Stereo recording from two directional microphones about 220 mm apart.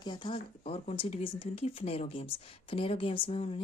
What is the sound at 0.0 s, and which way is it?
Speech, 20° left (ahead or behind).